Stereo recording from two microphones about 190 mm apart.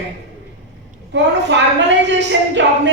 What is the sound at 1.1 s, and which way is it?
A woman's voice, 70° right (ahead or behind).